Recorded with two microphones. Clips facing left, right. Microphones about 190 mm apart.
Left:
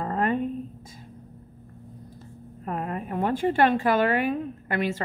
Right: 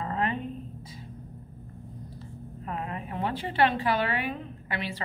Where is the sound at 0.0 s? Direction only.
45° left (ahead or behind).